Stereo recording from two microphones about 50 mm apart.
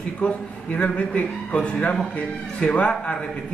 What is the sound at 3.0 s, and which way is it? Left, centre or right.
Speech, left.